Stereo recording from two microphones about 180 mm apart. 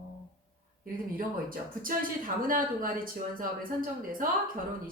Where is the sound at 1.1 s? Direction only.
50° right (ahead or behind).